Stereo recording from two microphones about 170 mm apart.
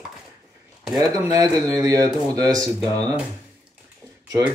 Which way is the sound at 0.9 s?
20° right (ahead or behind).